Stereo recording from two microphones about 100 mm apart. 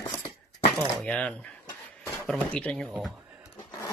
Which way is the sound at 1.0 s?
10° left (ahead or behind).